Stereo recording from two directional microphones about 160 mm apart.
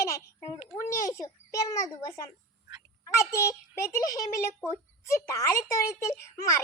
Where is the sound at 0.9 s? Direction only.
20° left (ahead or behind).